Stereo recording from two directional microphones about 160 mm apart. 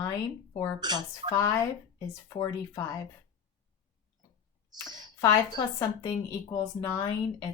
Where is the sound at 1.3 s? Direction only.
20° left (ahead or behind).